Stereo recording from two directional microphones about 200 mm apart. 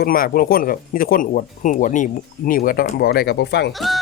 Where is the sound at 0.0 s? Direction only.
45° left (ahead or behind).